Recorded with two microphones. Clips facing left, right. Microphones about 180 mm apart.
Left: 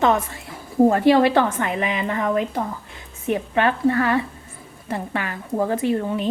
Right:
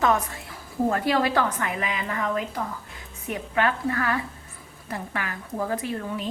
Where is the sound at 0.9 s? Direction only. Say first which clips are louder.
Left 7 dB; 25° left (ahead or behind).